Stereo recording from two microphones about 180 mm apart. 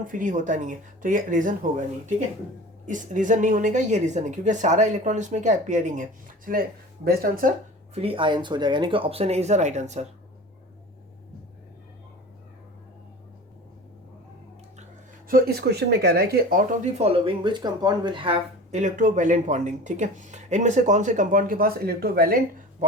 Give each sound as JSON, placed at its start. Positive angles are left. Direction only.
{"t": 0.1, "sound": "speech", "side_deg": -45}
{"t": 2.8, "sound": "speech", "side_deg": -45}
{"t": 7.9, "sound": "speech", "side_deg": -30}
{"t": 15.3, "sound": "speech", "side_deg": -60}
{"t": 17.0, "sound": "speech", "side_deg": -30}
{"t": 18.8, "sound": "speech", "side_deg": -45}